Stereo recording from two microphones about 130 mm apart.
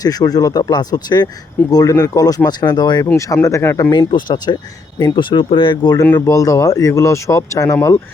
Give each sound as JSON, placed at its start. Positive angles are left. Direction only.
{"t": 0.0, "sound": "speech", "side_deg": 30}
{"t": 4.1, "sound": "speech", "side_deg": 35}